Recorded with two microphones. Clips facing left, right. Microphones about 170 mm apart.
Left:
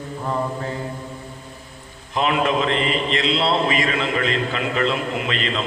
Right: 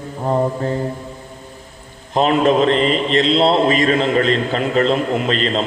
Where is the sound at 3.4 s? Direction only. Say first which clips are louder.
Right 6 dB; 45° right (ahead or behind).